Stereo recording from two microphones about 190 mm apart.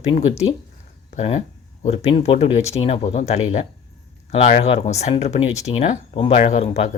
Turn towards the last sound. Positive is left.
turn(degrees=35)  # may be behind; listen again after turning